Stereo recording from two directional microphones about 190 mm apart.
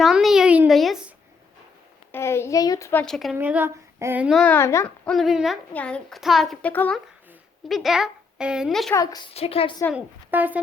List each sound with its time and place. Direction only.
0.0 s a sound: centre (ahead or behind)
2.1 s a sound: 15° left (ahead or behind)
3.3 s a child's voice: 10° right (ahead or behind); by 5.1 s 15° left (ahead or behind)
5.1 s a child's voice: centre (ahead or behind)
8.9 s a woman's voice: 20° left (ahead or behind)
9.9 s a woman's voice: 10° right (ahead or behind)